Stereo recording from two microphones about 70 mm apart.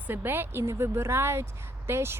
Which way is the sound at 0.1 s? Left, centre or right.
Right.